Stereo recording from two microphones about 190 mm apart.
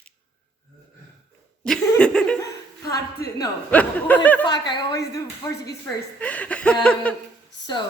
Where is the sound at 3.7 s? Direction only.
10° left (ahead or behind).